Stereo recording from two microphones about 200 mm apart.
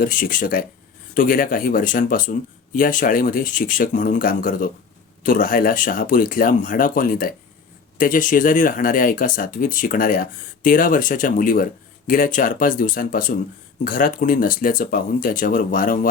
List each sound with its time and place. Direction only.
0.0 s speech: 45° left (ahead or behind)